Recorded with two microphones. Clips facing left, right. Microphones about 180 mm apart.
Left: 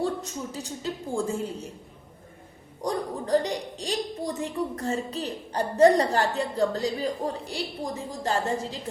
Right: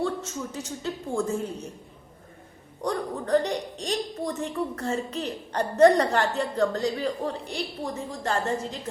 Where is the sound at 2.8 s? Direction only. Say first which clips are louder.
Even; 35° left (ahead or behind).